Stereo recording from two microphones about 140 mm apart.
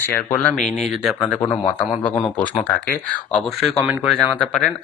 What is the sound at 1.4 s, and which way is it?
Speech, 30° left (ahead or behind).